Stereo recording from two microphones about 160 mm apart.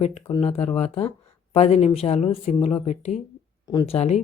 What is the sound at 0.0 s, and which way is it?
Speech, 40° left (ahead or behind).